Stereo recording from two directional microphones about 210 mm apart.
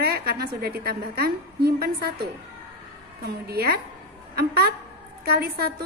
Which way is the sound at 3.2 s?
45° right (ahead or behind).